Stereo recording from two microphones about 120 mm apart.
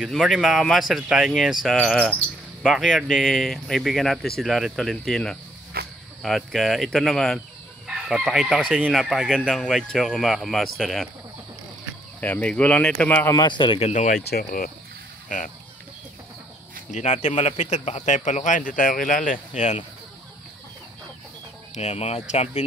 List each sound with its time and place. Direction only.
0.1 s speech: centre (ahead or behind)
12.2 s speech: 10° left (ahead or behind)
13.3 s a man's voice: 40° left (ahead or behind)
13.7 s speech: 80° left
15.2 s speech: 90° left
16.9 s speech: 75° left (ahead or behind); by 18.6 s 90° left
19.5 s speech: 80° left
21.7 s speech: 60° left (ahead or behind)